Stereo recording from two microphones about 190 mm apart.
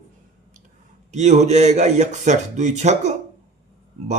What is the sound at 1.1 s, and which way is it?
Speech, 35° right (ahead or behind).